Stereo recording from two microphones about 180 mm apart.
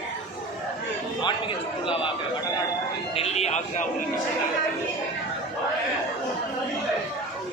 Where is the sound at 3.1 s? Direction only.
35° left (ahead or behind).